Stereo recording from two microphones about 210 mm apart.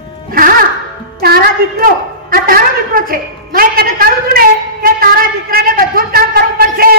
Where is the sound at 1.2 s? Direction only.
45° right (ahead or behind).